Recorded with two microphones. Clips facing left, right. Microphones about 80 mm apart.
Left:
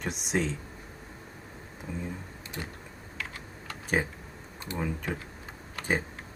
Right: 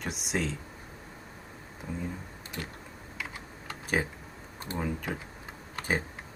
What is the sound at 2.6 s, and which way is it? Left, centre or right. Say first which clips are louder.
Typing: even; centre.